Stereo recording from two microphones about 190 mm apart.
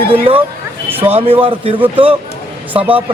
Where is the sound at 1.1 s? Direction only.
30° right (ahead or behind).